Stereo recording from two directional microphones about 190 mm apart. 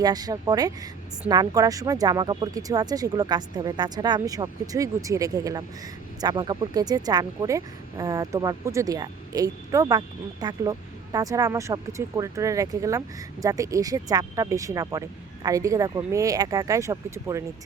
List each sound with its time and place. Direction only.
0.0 s speech: 20° right (ahead or behind)